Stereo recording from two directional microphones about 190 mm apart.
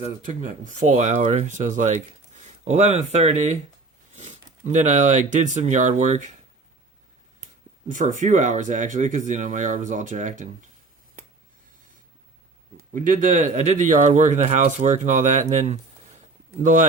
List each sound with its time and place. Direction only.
0.0 s speech: 40° right (ahead or behind)
7.9 s speech: 40° right (ahead or behind)
12.7 s speech: 45° right (ahead or behind)